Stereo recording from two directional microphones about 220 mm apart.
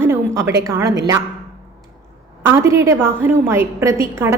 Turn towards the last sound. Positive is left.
turn(degrees=-10)  # may be behind; listen again after turning